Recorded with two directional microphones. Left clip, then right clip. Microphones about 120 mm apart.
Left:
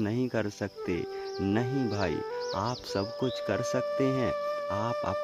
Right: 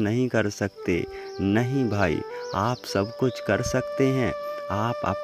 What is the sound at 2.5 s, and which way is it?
Speech, 40° right (ahead or behind).